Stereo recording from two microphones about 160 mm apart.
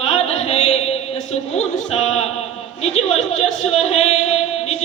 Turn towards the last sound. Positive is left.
turn(degrees=40)  # may be behind; listen again after turning